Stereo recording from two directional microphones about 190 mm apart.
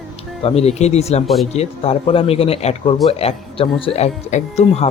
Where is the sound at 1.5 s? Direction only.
30° left (ahead or behind).